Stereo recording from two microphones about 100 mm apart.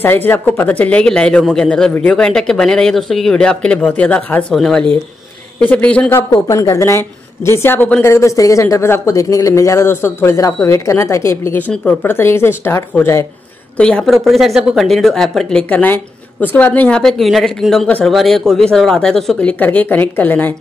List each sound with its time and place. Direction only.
0.0 s a man's voice: 20° left (ahead or behind); by 4.8 s centre (ahead or behind)
5.6 s a man's voice: 15° left (ahead or behind)
6.3 s a woman's voice: 35° left (ahead or behind)
11.6 s a man's voice: 10° left (ahead or behind)
11.9 s a woman's voice: 20° left (ahead or behind)
13.7 s a man's voice: 10° left (ahead or behind)
14.0 s speech: centre (ahead or behind)
15.7 s a man's voice: 15° left (ahead or behind)
17.0 s speech: centre (ahead or behind)
19.6 s a man's voice: 15° left (ahead or behind)